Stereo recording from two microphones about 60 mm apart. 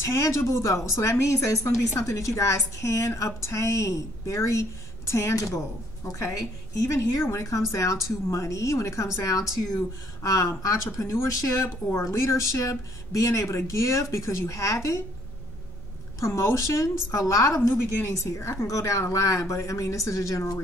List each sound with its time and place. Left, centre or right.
0.0 s speech: left
6.0 s speech: left
16.2 s speech: left
17.6 s speech: left